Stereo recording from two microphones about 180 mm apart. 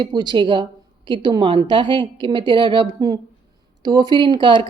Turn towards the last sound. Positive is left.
turn(degrees=-25)  # may be behind; listen again after turning